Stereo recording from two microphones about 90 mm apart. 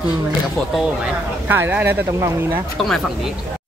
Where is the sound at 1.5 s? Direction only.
20° right (ahead or behind).